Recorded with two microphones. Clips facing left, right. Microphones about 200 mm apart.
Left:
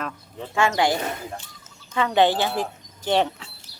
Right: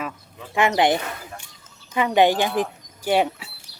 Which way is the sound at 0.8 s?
20° right (ahead or behind).